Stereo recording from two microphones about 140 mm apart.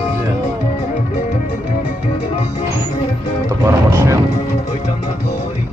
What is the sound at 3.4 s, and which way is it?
Music, 20° right (ahead or behind).